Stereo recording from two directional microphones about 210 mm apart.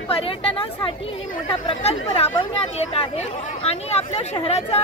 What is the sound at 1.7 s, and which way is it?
Speech, 30° left (ahead or behind).